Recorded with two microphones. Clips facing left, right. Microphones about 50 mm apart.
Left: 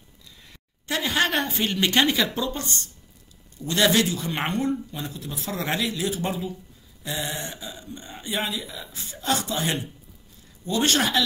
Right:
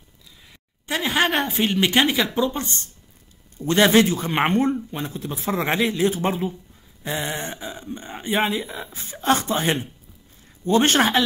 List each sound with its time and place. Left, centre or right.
0.8 s a woman's voice: centre
3.5 s speech: right